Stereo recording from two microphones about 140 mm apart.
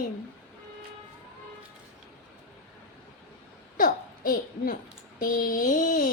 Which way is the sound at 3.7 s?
80° left.